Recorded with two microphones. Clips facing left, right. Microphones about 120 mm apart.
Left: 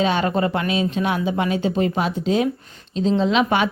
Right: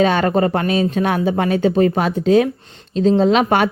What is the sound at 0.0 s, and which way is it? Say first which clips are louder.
Speech: right 4 dB; 50° right (ahead or behind).